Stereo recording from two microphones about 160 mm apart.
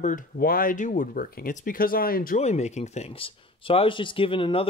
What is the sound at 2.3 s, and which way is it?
Speech, 45° left (ahead or behind).